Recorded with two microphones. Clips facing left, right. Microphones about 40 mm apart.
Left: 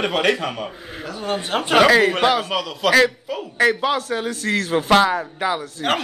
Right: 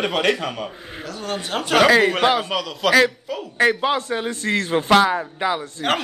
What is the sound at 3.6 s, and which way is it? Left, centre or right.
Speech, right.